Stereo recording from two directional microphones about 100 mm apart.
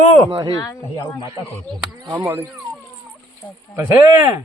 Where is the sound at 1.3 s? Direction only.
35° right (ahead or behind).